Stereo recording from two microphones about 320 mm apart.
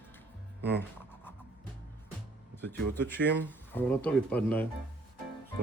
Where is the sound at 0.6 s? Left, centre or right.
Right.